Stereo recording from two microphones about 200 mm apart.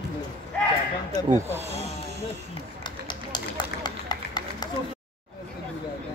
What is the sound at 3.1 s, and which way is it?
Run, 20° left (ahead or behind).